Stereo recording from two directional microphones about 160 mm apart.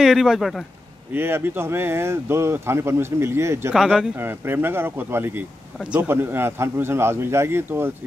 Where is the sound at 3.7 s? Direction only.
Centre (ahead or behind).